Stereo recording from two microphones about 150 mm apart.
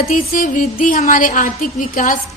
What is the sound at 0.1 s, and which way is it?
A woman's voice, 65° left (ahead or behind).